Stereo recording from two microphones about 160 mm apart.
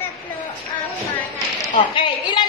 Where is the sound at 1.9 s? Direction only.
30° left (ahead or behind).